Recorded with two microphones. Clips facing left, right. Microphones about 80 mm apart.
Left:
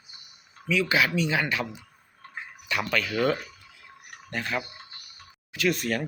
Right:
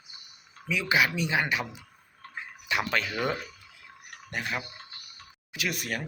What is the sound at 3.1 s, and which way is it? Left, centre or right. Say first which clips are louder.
Speech: left 5 dB; centre.